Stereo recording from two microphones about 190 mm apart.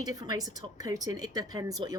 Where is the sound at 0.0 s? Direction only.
20° right (ahead or behind).